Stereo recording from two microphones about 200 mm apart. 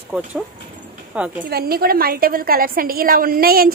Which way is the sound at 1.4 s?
50° right (ahead or behind).